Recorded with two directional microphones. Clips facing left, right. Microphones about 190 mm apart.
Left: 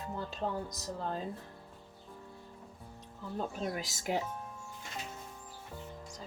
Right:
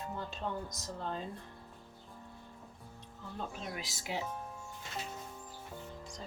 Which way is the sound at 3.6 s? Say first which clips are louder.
Left 6 dB; 45° left (ahead or behind).